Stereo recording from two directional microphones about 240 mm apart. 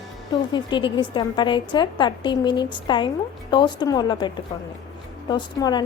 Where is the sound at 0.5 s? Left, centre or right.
Centre.